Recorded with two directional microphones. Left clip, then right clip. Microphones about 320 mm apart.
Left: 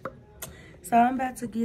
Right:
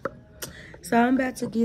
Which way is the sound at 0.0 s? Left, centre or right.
Centre.